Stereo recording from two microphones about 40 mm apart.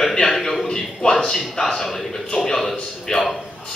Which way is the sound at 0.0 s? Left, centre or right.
Centre.